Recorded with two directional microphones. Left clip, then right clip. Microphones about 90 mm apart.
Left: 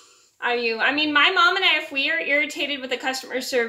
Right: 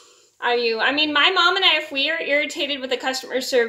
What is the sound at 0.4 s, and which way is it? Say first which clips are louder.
A woman's voice: right 2 dB; 20° right (ahead or behind).